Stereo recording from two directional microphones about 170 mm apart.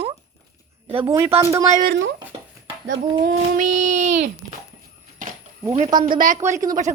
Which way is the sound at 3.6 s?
45° right (ahead or behind).